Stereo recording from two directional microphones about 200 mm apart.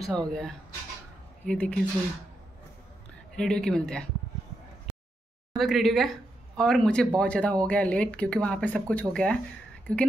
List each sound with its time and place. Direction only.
0.0 s speech: 5° left (ahead or behind)
3.3 s speech: 5° left (ahead or behind)
5.6 s speech: centre (ahead or behind)